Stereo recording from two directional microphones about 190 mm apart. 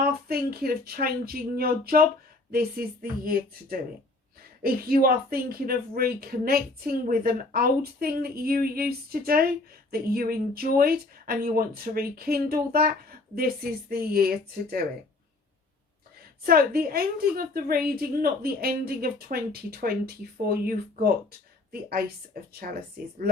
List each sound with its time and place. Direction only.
0.0 s speech: 50° right (ahead or behind)
16.5 s speech: 50° right (ahead or behind)
20.5 s speech: 50° right (ahead or behind)